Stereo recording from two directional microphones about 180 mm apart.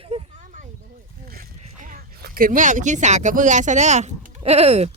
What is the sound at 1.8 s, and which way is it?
Speech, 50° right (ahead or behind).